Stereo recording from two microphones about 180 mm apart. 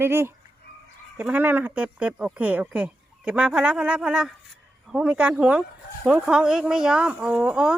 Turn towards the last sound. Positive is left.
turn(degrees=-5)  # may be behind; listen again after turning